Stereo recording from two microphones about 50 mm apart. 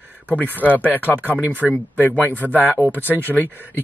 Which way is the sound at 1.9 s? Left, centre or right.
Left.